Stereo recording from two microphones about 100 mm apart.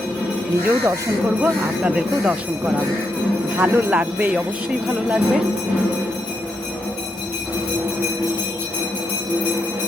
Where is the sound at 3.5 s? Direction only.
15° right (ahead or behind).